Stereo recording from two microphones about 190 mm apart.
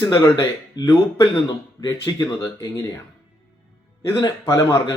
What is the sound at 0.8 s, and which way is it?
Speech, 20° left (ahead or behind).